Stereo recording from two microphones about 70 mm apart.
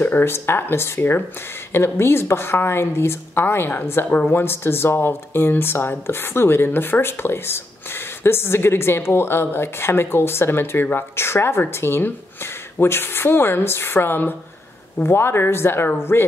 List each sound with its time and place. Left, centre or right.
0.0 s a woman's voice: left